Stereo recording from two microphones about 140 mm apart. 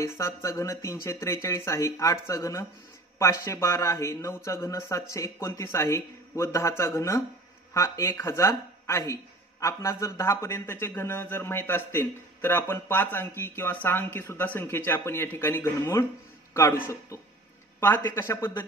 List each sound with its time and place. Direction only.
0.0 s speech: 20° left (ahead or behind)